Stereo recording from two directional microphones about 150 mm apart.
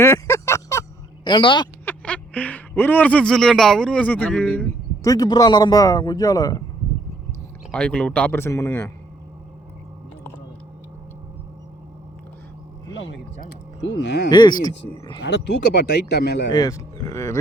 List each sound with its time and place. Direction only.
0.0 s a sound: 20° left (ahead or behind)
1.2 s speech: 30° left (ahead or behind)
1.8 s speech: 10° left (ahead or behind)
5.0 s a man's voice: 25° left (ahead or behind)
7.7 s speech: 5° left (ahead or behind)
13.9 s a man's voice: 30° left (ahead or behind)
15.6 s speech: 90° left
16.5 s a man's voice: 25° left (ahead or behind)